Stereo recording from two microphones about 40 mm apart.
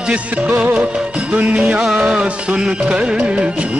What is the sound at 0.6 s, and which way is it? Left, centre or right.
Music, right.